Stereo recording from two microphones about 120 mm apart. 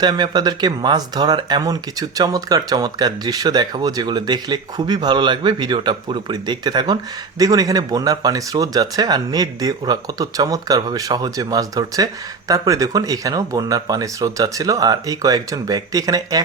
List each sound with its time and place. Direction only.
0.0 s speech: 35° right (ahead or behind)